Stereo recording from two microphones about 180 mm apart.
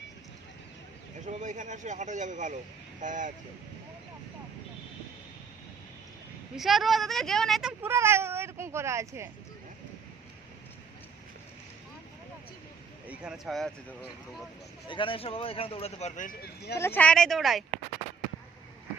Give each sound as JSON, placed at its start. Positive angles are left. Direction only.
{"t": 1.2, "sound": "speech", "side_deg": -45}
{"t": 6.6, "sound": "speech", "side_deg": 0}
{"t": 13.1, "sound": "speech", "side_deg": -5}
{"t": 14.8, "sound": "a man's voice", "side_deg": 30}
{"t": 16.7, "sound": "speech", "side_deg": 15}